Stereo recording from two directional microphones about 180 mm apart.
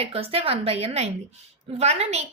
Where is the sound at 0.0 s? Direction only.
30° right (ahead or behind).